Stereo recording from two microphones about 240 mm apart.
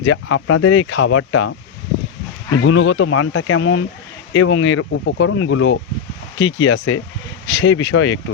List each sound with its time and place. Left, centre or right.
0.0 s speech: left
2.6 s speech: left